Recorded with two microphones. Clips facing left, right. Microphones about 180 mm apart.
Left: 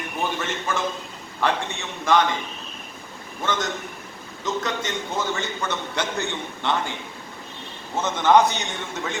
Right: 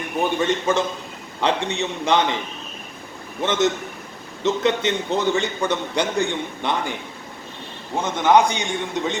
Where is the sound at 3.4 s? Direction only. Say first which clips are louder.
Right 6 dB; 20° right (ahead or behind).